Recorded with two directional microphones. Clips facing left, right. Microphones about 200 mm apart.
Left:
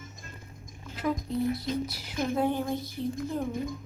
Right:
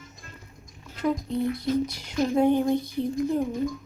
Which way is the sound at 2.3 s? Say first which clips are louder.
Right 7 dB; 20° right (ahead or behind).